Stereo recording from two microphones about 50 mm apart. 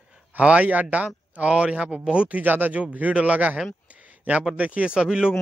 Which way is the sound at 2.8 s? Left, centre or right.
Right.